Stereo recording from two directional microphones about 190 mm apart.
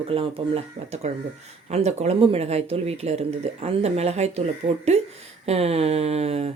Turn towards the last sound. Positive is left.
turn(degrees=-35)  # may be behind; listen again after turning